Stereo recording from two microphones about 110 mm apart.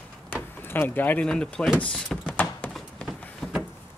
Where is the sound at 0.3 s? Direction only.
20° left (ahead or behind).